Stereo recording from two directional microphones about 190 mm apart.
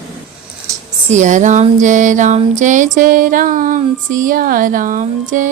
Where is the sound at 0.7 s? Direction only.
15° right (ahead or behind).